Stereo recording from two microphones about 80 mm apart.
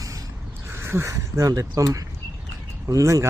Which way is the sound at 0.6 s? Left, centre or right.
Right.